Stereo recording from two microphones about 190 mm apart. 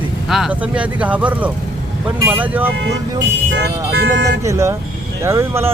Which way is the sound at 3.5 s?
60° right (ahead or behind).